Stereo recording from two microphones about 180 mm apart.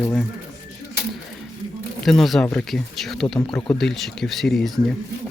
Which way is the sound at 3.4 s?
25° left (ahead or behind).